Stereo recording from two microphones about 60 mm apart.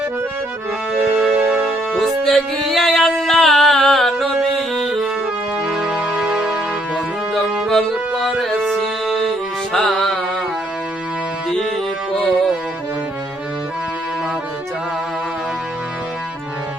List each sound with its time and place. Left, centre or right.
0.9 s music: centre
1.9 s music: centre
5.6 s music: centre
7.7 s music: centre
11.4 s music: centre